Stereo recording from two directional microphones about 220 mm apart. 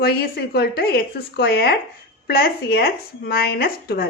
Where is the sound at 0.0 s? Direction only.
45° left (ahead or behind).